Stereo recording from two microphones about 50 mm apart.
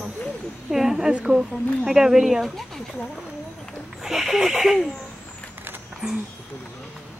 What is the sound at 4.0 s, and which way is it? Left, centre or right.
Speech, centre.